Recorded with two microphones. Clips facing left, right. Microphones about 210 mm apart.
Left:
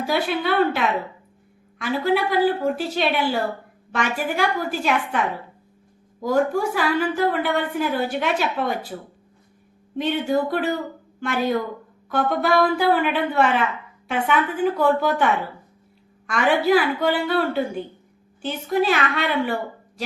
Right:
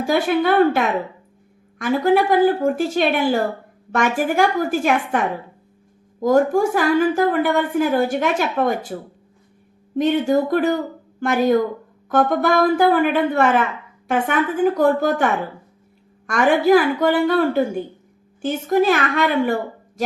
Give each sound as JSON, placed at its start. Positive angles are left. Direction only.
{"t": 0.0, "sound": "a woman's voice", "side_deg": -45}